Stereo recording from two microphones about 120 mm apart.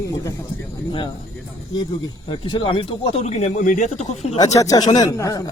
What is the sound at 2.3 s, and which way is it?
Speech, 40° left (ahead or behind).